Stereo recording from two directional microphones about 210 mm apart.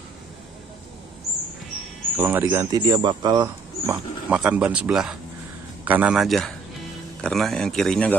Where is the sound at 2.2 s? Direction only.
10° right (ahead or behind).